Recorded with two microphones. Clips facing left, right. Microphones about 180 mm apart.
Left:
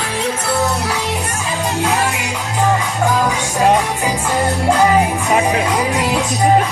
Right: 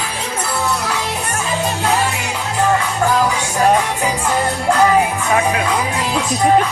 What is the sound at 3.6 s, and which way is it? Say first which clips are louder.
Music: even; 15° left (ahead or behind).